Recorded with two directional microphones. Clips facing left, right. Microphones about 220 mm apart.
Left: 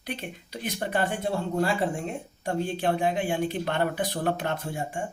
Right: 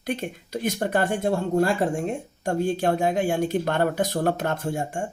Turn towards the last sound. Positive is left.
turn(degrees=-45)  # may be behind; listen again after turning